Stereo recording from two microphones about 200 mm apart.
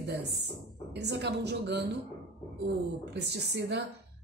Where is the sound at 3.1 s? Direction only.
55° right (ahead or behind).